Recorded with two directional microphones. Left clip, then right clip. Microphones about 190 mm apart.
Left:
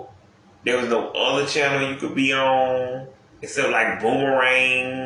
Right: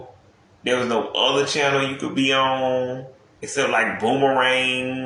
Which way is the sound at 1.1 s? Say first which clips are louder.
Right 1 dB; 55° right (ahead or behind).